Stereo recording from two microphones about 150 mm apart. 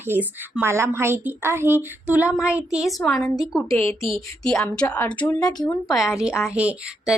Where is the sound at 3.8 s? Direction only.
40° right (ahead or behind).